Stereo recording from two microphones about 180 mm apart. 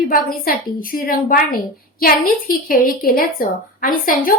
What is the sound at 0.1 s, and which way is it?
A woman's voice, 50° left (ahead or behind).